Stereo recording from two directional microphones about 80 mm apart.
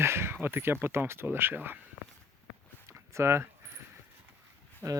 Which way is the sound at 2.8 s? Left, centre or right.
Right.